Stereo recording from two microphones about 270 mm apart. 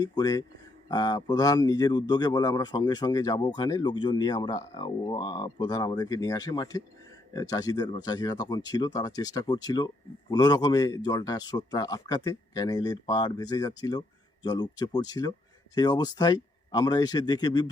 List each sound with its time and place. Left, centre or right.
0.0 s speech: centre